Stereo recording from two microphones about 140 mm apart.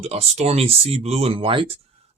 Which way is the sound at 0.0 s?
50° right (ahead or behind).